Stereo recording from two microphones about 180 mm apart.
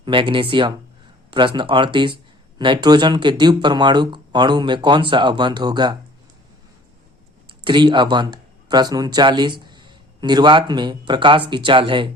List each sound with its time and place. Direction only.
0.0 s speech: 30° right (ahead or behind)
7.6 s speech: 25° right (ahead or behind)